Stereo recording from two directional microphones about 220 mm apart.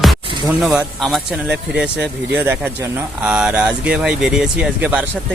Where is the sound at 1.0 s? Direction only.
5° right (ahead or behind).